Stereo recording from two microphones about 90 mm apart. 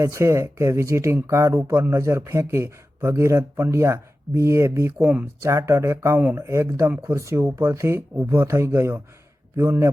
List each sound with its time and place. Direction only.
0.0 s speech: 35° right (ahead or behind)